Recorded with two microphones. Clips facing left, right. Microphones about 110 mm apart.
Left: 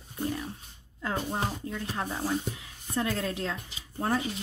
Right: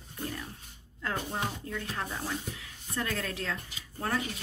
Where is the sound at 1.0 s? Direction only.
15° left (ahead or behind).